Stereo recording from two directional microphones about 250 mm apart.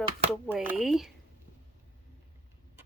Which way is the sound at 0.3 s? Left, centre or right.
Centre.